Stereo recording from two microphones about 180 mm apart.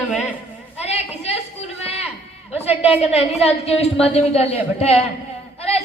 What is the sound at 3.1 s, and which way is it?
A woman's voice, 35° left (ahead or behind).